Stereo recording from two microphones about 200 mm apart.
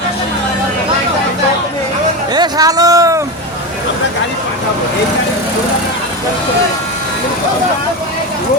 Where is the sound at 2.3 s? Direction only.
20° right (ahead or behind).